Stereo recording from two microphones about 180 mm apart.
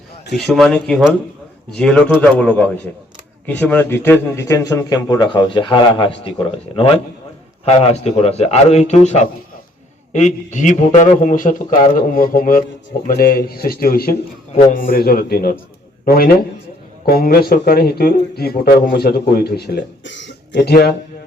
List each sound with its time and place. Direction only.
0.4 s a man's voice: centre (ahead or behind); by 6.3 s 30° left (ahead or behind)
7.6 s a man's voice: 35° left (ahead or behind); by 20.7 s 80° left